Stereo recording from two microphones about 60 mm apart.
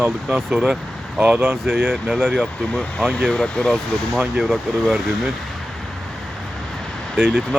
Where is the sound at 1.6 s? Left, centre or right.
Centre.